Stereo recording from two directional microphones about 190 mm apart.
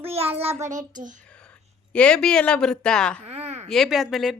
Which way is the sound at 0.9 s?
45° right (ahead or behind).